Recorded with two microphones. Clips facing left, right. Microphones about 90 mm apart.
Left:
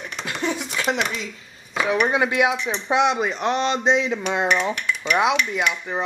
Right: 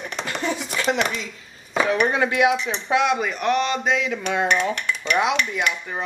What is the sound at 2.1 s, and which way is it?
Speech, 20° left (ahead or behind).